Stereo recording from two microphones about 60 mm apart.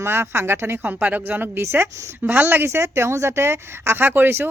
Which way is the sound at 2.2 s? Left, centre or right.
Right.